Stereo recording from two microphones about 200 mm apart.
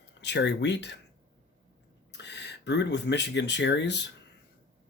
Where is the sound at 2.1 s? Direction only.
60° left (ahead or behind).